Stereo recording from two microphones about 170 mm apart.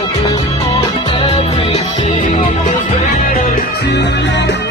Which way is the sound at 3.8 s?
85° left.